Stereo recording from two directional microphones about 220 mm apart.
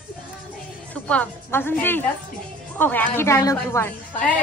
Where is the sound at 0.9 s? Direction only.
5° left (ahead or behind).